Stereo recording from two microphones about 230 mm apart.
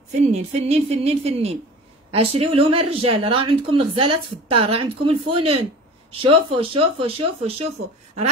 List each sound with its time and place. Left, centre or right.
0.1 s speech: right